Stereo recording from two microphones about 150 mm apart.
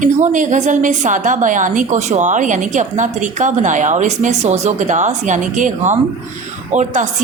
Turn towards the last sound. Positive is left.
turn(degrees=-55)  # may be behind; listen again after turning